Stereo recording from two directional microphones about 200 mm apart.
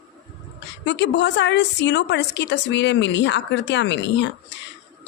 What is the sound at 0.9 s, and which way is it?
A woman's voice, 60° left (ahead or behind).